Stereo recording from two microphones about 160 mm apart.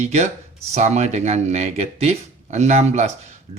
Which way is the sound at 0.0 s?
45° right (ahead or behind).